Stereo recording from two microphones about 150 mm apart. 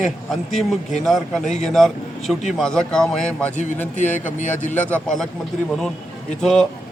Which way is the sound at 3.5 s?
50° left (ahead or behind).